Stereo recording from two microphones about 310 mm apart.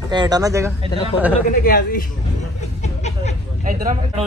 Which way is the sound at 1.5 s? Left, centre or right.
Left.